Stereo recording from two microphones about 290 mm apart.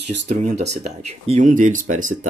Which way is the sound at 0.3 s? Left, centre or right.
Right.